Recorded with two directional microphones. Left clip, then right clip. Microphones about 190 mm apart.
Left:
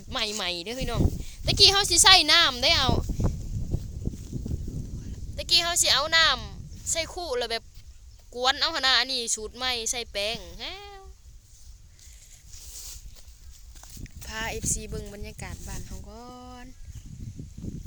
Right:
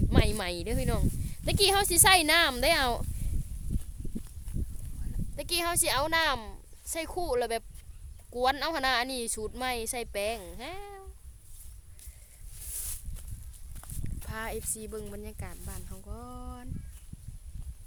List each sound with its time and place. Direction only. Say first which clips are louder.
0.1 s speech: left 3 dB; 15° right (ahead or behind)
5.4 s speech: left 7 dB; 15° right (ahead or behind)
14.3 s speech: left 6 dB; centre (ahead or behind)